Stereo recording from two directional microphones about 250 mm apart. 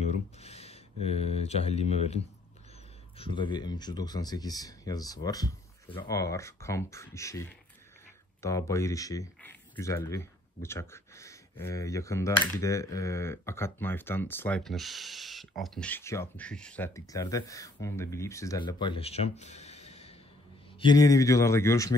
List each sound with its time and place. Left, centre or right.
0.4 s speech: left
3.2 s speech: centre